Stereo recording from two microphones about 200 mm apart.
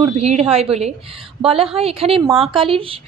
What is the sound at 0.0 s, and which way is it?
A woman's voice, 30° right (ahead or behind).